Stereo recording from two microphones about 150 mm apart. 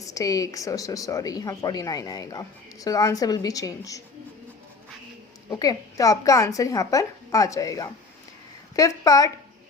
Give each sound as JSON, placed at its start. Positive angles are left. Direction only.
{"t": 0.0, "sound": "a woman's voice", "side_deg": 25}
{"t": 5.5, "sound": "a woman's voice", "side_deg": 25}